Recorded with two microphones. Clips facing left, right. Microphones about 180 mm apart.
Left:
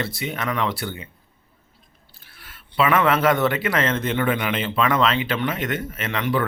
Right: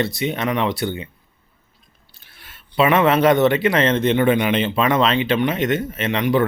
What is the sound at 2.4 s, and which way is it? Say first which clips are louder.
Speech: right 4 dB; 25° right (ahead or behind).